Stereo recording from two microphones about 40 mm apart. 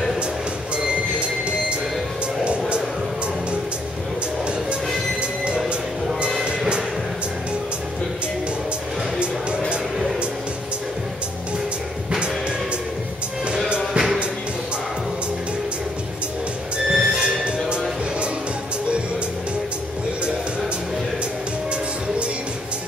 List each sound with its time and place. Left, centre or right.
6.4 s music: right
13.7 s music: centre
16.7 s music: right